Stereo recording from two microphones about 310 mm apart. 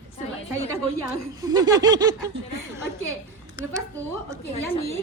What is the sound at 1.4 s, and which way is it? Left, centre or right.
Speech, centre.